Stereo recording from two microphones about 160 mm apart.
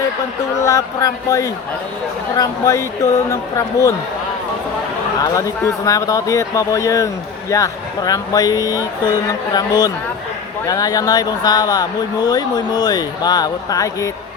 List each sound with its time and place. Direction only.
0.6 s speech: 20° left (ahead or behind)
5.2 s speech: 20° left (ahead or behind)